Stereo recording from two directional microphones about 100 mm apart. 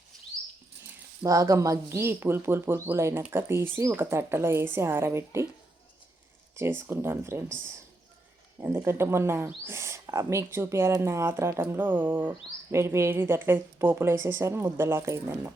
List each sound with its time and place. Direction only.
1.2 s speech: 35° right (ahead or behind)
6.6 s speech: 25° right (ahead or behind)
8.6 s speech: 25° right (ahead or behind)